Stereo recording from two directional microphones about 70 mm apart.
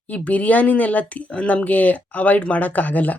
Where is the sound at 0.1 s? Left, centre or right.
Left.